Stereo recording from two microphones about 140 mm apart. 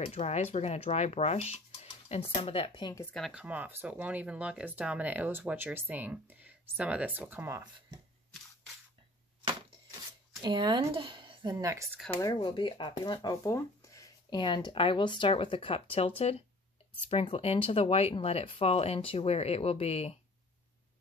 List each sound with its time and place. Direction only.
0.0 s speech: 50° left (ahead or behind)
2.9 s speech: 15° left (ahead or behind)
3.2 s speech: 5° right (ahead or behind)
10.4 s speech: 30° right (ahead or behind)
11.6 s speech: 20° right (ahead or behind)
12.2 s speech: 25° left (ahead or behind)
12.4 s speech: 35° left (ahead or behind)